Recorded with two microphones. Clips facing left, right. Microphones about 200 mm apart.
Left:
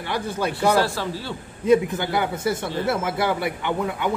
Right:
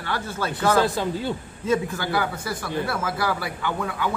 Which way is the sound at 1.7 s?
20° left (ahead or behind).